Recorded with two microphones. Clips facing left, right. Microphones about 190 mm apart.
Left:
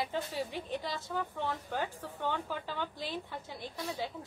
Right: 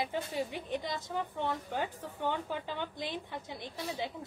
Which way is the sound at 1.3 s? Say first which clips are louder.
Right 3 dB; 15° right (ahead or behind).